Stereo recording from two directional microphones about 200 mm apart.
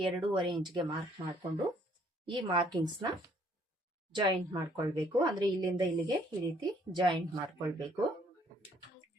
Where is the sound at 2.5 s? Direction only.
25° right (ahead or behind).